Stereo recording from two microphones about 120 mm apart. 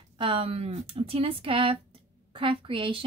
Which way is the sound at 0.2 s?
50° right (ahead or behind).